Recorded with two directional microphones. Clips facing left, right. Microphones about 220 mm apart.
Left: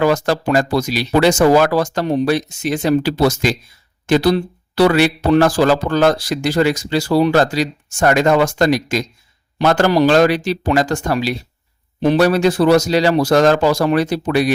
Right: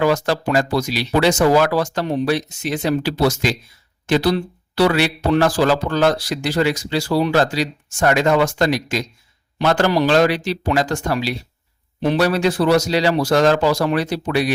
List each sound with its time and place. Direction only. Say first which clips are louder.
0.0 s speech: left 2 dB; 45° left (ahead or behind)